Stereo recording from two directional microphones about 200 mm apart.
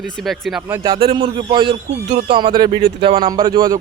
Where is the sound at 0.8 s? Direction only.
25° right (ahead or behind).